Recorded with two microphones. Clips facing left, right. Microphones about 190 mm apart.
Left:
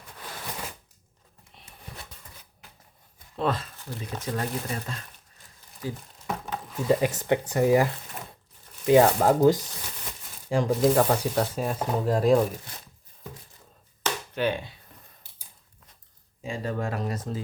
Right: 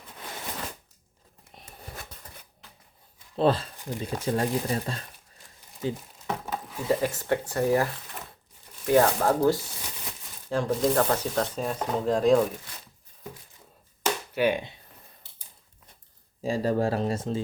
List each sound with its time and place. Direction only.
3.3 s speech: 30° right (ahead or behind)
3.8 s a sound: 15° right (ahead or behind)
4.2 s speech: 30° right (ahead or behind)
6.2 s a sound: centre (ahead or behind)
7.0 s speech: 20° left (ahead or behind)
8.9 s speech: 15° left (ahead or behind)
14.0 s chop: 10° right (ahead or behind)
16.4 s speech: 35° right (ahead or behind)